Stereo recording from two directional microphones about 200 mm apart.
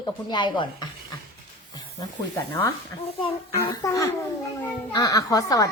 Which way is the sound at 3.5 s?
15° left (ahead or behind).